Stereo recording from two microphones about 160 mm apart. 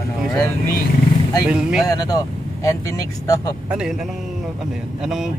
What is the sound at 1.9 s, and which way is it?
Speech, 25° left (ahead or behind).